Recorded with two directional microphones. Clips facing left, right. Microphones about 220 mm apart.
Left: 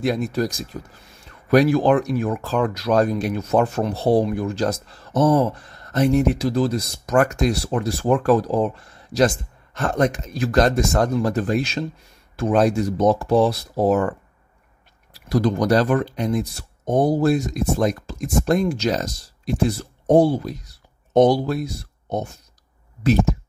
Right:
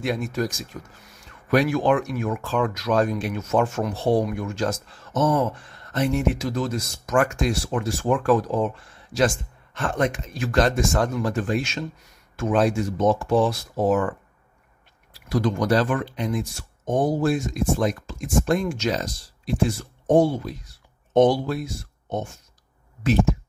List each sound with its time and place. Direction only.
0.0 s speech: 35° left (ahead or behind)
15.2 s speech: 35° left (ahead or behind)